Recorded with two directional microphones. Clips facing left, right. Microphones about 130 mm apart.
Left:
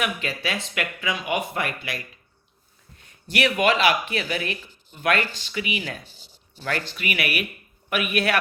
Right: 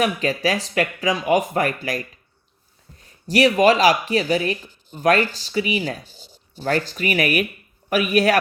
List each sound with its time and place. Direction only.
0.0 s speech: 35° right (ahead or behind)